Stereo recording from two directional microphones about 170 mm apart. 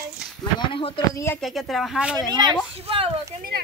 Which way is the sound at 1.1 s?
15° left (ahead or behind).